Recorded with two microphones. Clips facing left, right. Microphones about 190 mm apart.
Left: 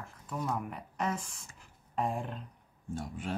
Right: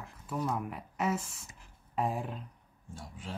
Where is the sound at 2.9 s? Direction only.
55° left (ahead or behind).